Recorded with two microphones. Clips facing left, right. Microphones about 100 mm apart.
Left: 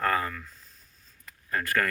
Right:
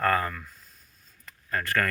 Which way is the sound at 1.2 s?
10° left (ahead or behind).